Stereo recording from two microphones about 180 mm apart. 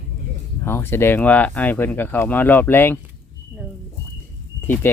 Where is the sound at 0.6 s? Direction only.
15° left (ahead or behind).